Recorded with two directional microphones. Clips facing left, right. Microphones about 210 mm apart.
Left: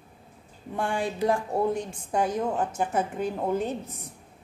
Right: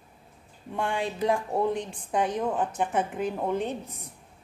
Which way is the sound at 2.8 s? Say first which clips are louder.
Even; centre (ahead or behind).